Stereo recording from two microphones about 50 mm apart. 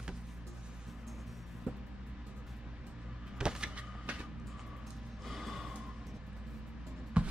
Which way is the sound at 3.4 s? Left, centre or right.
Centre.